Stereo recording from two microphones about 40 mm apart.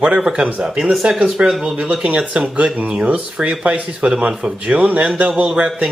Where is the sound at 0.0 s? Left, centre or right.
Right.